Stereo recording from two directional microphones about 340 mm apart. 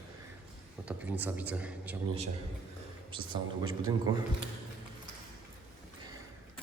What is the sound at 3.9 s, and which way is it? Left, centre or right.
Speech, centre.